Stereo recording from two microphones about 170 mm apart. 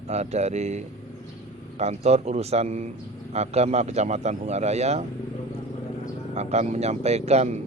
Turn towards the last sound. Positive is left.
turn(degrees=-40)  # may be behind; listen again after turning